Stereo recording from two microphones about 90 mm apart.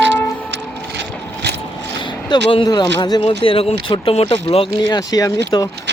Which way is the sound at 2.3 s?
55° left (ahead or behind).